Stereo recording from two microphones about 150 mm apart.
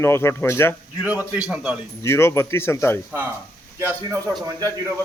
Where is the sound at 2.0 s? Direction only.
20° left (ahead or behind).